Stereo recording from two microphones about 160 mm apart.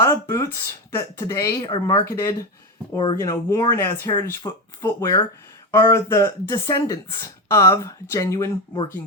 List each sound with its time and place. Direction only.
0.0 s speech: 20° left (ahead or behind)